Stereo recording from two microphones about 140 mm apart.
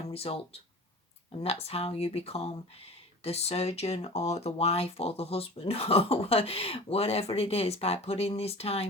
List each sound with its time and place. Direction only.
0.1 s speech: 45° left (ahead or behind)